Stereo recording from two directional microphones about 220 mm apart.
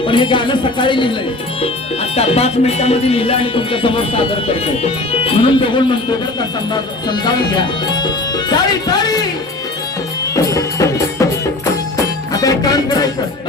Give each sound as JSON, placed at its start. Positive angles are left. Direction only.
{"t": 0.0, "sound": "speech", "side_deg": 20}
{"t": 2.1, "sound": "speech", "side_deg": 30}
{"t": 10.3, "sound": "music", "side_deg": 15}